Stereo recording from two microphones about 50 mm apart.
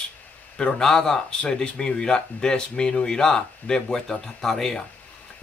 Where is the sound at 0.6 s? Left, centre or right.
Centre.